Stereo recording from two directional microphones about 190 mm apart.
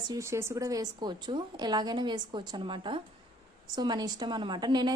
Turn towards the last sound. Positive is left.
turn(degrees=-25)  # may be behind; listen again after turning